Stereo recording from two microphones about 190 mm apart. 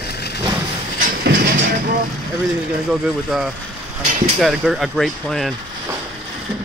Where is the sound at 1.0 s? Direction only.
50° right (ahead or behind).